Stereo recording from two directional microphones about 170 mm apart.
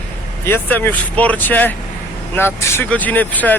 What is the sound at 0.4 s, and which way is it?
Speech, 15° left (ahead or behind).